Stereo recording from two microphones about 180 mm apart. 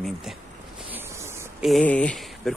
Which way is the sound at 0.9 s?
15° right (ahead or behind).